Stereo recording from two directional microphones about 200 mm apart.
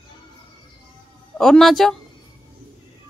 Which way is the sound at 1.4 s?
Centre (ahead or behind).